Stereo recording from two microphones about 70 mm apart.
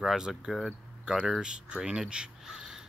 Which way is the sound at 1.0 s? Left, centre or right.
Centre.